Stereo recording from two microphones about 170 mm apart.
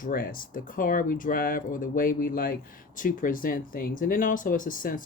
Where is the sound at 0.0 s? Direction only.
55° left (ahead or behind).